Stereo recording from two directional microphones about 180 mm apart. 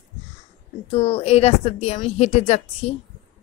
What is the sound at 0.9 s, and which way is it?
Speech, 35° left (ahead or behind).